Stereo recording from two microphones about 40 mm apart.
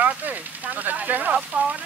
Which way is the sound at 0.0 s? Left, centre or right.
Right.